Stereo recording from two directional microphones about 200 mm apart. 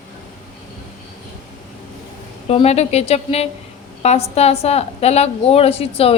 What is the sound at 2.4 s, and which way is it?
A woman's voice, 30° left (ahead or behind).